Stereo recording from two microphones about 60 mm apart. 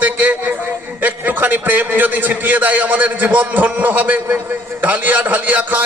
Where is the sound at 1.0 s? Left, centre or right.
Right.